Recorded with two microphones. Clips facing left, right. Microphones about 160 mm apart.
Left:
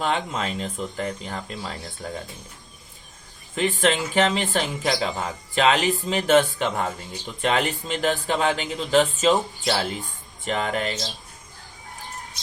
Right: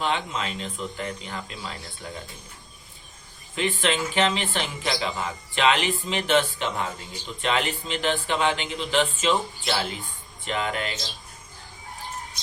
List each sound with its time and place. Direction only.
0.0 s speech: 45° left (ahead or behind)
3.5 s speech: 45° left (ahead or behind)